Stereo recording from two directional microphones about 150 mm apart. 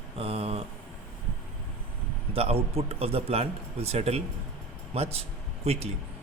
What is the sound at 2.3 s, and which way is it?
A man's voice, 40° right (ahead or behind).